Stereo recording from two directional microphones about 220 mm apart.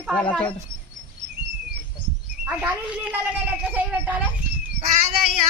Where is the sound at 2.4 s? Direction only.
5° right (ahead or behind).